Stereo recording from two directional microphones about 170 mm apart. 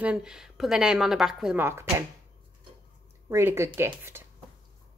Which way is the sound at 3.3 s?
15° right (ahead or behind).